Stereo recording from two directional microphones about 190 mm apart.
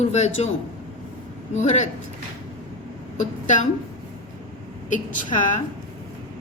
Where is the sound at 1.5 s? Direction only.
40° left (ahead or behind).